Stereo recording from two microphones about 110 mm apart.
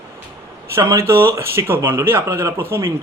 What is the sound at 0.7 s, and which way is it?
Speech, 25° right (ahead or behind).